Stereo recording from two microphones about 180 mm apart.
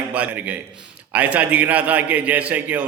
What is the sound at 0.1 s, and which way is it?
A man's voice, 5° right (ahead or behind).